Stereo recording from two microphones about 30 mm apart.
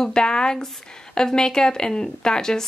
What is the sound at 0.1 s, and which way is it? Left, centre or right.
Speech, left.